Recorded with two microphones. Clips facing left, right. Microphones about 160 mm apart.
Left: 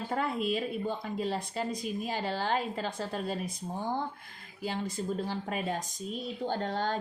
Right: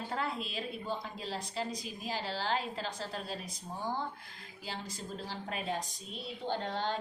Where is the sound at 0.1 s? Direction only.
50° left (ahead or behind).